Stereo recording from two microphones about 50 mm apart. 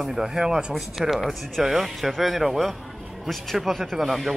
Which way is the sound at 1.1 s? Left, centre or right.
Centre.